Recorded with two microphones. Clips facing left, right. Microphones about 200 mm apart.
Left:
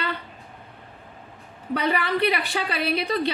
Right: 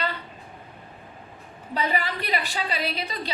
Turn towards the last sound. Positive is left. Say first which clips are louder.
# left 5 dB
turn(degrees=60)  # may be behind; listen again after turning